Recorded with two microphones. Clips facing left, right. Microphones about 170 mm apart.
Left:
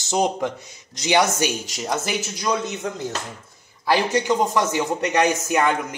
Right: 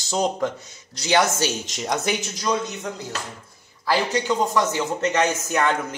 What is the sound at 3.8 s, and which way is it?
A man's voice, 15° left (ahead or behind).